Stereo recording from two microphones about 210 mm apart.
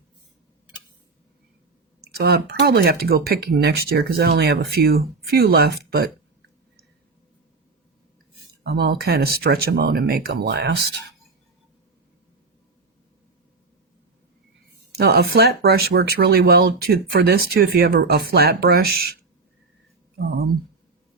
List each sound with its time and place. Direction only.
2.1 s speech: 50° right (ahead or behind)
8.6 s speech: 50° right (ahead or behind)
14.9 s speech: 50° right (ahead or behind)
20.1 s speech: 45° right (ahead or behind)